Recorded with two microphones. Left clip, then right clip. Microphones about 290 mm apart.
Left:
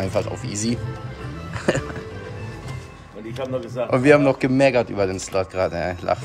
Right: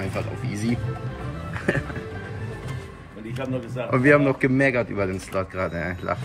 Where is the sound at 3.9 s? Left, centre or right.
Centre.